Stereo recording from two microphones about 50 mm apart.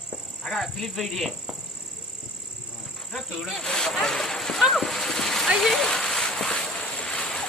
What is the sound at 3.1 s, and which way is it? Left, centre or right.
Speech, centre.